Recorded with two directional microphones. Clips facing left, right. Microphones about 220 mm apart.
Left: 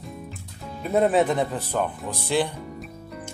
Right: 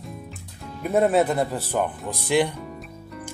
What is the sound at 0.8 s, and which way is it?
Speech, 5° right (ahead or behind).